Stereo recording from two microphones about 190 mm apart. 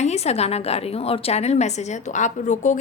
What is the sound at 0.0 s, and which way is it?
A woman's voice, 35° left (ahead or behind).